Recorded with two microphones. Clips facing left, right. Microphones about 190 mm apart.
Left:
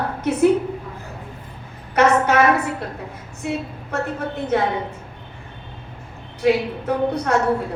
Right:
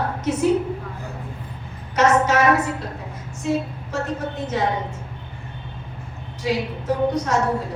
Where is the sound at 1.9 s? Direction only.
60° left (ahead or behind).